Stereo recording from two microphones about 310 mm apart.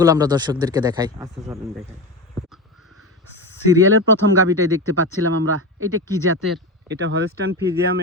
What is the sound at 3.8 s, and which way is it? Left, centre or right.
Speech, right.